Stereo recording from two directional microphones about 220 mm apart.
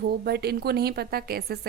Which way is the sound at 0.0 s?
50° right (ahead or behind).